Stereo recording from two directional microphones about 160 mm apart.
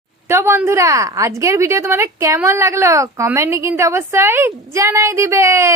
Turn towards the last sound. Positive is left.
turn(degrees=-20)  # may be behind; listen again after turning